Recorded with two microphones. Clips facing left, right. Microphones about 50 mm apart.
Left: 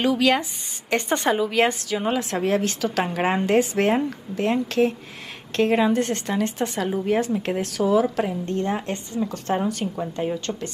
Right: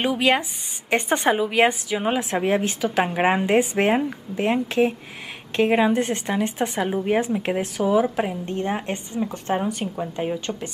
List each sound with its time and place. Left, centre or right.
0.0 s a woman's voice: right